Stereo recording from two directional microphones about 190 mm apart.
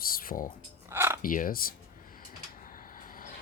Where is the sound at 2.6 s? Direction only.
45° left (ahead or behind).